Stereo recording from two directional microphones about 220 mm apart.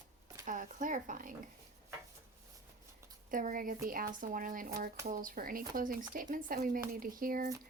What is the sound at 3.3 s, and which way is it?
Speech, 40° right (ahead or behind).